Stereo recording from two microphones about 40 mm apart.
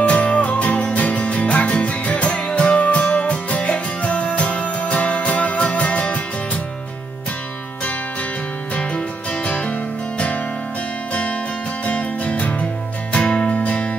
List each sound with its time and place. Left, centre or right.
0.0 s music: left
8.7 s music: left
11.8 s music: left
13.1 s music: left